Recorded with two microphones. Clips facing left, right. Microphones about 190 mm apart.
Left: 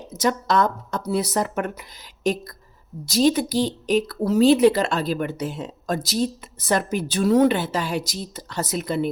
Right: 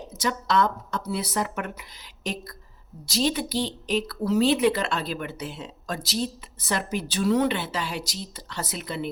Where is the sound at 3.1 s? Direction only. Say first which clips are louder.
Left 6 dB; 45° left (ahead or behind).